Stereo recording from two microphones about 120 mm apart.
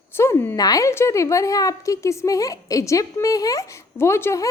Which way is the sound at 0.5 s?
30° left (ahead or behind).